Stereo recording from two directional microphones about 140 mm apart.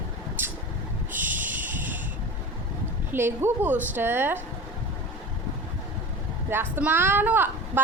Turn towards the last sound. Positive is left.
turn(degrees=-15)  # may be behind; listen again after turning